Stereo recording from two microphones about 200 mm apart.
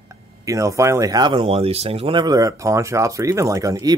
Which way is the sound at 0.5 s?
15° right (ahead or behind).